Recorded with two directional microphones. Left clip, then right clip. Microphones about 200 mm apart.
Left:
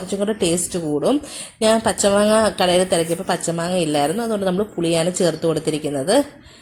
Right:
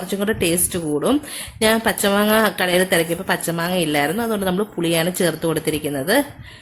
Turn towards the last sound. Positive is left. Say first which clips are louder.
# left 1 dB
turn(degrees=-5)  # may be behind; listen again after turning